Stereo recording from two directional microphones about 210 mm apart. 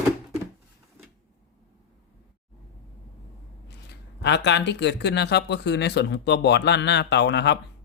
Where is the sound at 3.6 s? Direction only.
50° left (ahead or behind).